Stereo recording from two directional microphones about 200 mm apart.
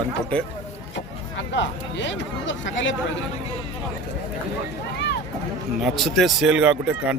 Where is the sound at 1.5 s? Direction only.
65° left (ahead or behind).